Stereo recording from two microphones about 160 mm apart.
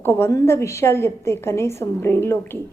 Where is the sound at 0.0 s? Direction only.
15° left (ahead or behind).